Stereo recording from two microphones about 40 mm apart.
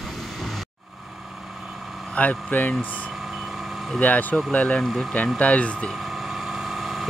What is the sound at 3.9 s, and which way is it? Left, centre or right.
Speech, left.